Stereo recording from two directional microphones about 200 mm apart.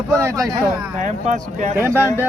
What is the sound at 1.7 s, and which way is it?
Speech, 10° right (ahead or behind).